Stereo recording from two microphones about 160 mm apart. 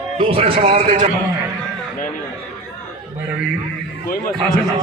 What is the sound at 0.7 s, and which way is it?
Speech, 55° right (ahead or behind).